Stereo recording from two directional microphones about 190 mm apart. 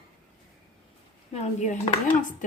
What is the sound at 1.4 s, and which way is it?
Speech, 40° left (ahead or behind).